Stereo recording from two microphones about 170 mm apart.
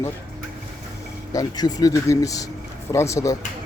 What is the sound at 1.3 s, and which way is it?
Speech, 20° left (ahead or behind).